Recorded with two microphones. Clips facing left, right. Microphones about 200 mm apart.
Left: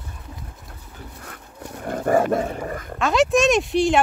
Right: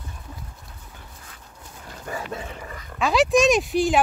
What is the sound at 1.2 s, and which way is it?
Dog, 65° left (ahead or behind).